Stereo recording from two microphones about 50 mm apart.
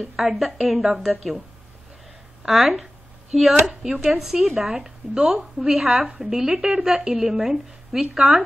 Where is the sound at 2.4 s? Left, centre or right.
Centre.